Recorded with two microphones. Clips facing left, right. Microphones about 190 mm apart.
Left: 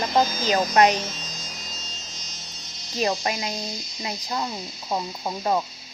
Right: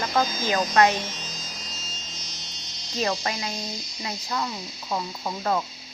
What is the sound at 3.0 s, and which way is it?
Speech, 20° left (ahead or behind).